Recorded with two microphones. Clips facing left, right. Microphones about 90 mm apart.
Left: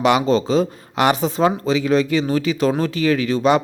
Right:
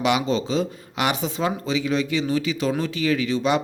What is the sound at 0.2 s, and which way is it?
Speech, 40° left (ahead or behind).